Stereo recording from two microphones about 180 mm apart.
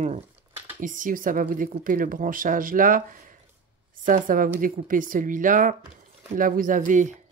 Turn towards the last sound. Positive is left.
turn(degrees=-45)  # may be behind; listen again after turning